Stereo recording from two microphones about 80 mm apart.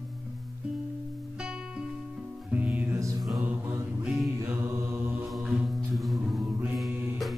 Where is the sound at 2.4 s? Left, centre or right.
Centre.